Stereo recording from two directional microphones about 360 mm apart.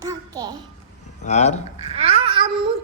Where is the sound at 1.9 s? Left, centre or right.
Centre.